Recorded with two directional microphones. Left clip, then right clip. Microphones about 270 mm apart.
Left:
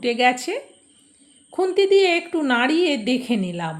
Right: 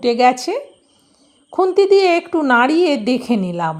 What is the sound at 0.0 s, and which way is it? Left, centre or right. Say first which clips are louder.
A woman's voice: right 5 dB; right.